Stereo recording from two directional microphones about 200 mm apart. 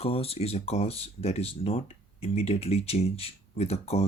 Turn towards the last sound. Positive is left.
turn(degrees=30)  # may be behind; listen again after turning